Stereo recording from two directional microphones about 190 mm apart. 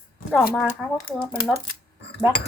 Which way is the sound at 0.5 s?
Centre (ahead or behind).